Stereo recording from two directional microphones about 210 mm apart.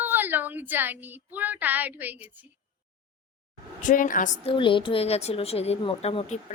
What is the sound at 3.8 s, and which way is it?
A woman's voice, 40° left (ahead or behind).